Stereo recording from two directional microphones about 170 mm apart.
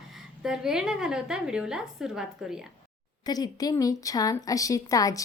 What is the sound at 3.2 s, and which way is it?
A woman's voice, 20° left (ahead or behind).